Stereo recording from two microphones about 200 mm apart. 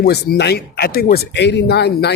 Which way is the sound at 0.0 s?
50° left (ahead or behind).